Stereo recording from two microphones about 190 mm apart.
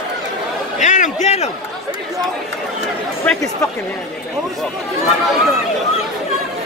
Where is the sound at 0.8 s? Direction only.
40° left (ahead or behind).